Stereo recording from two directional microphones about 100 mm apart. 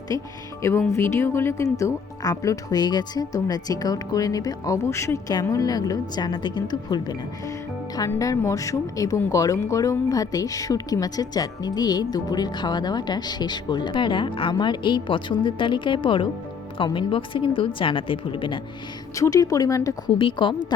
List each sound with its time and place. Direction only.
0.1 s a woman's voice: 35° left (ahead or behind); by 18.6 s 55° left (ahead or behind)
19.1 s speech: 35° left (ahead or behind)
20.1 s speech: 55° left (ahead or behind)